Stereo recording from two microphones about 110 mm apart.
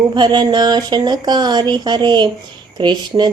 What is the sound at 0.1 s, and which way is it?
Speech, 45° right (ahead or behind).